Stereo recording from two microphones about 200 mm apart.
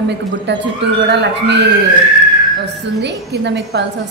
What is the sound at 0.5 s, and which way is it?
Speech, 60° right (ahead or behind).